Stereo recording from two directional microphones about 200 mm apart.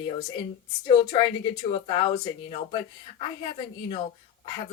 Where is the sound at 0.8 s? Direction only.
25° left (ahead or behind).